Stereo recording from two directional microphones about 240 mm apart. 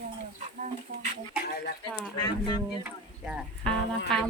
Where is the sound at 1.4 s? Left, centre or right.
Left.